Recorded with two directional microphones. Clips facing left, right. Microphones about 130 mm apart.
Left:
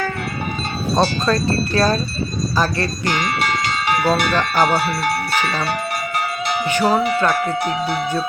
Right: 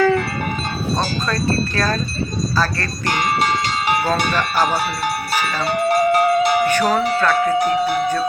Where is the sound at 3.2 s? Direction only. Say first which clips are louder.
Right 5 dB; 40° right (ahead or behind).